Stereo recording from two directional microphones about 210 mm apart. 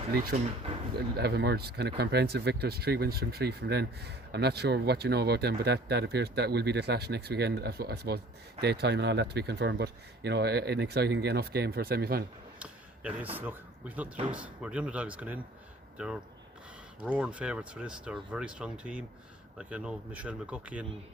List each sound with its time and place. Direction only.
0.1 s speech: 45° right (ahead or behind)
12.5 s a sound: 5° right (ahead or behind)
13.3 s speech: 10° right (ahead or behind)
17.1 s speech: 5° right (ahead or behind)